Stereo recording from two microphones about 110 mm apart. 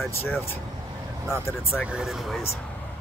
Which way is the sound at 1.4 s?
20° left (ahead or behind).